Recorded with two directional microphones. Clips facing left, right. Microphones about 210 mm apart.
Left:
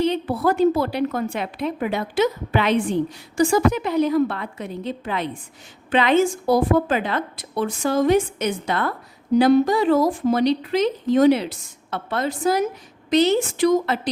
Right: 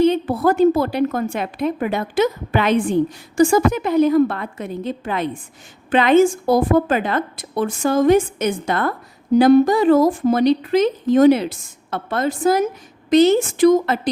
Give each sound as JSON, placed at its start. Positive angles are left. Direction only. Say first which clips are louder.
{"t": 0.0, "sound": "a woman's voice", "louder": "right 5 dB", "side_deg": -50}